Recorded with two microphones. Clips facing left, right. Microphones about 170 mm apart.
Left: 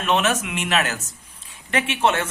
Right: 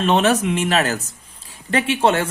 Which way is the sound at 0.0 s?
35° right (ahead or behind).